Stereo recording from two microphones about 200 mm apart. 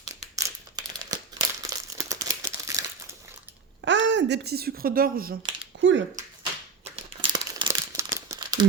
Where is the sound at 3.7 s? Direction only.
65° right (ahead or behind); by 5.4 s 45° right (ahead or behind).